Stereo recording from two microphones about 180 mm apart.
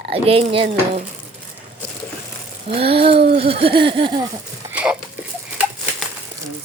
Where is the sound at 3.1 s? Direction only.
65° right (ahead or behind).